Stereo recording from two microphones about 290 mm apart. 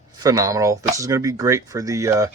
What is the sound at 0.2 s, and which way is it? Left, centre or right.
Speech, centre.